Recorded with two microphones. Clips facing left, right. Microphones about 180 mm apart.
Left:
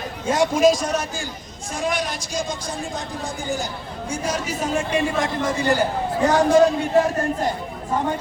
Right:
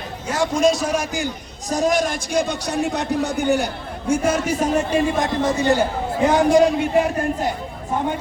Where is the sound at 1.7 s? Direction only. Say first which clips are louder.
Right 6 dB; 45° right (ahead or behind).